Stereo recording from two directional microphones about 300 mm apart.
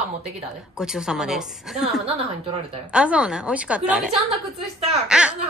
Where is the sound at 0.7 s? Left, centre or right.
Centre.